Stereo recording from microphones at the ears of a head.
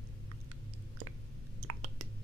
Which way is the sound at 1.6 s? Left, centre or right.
Right.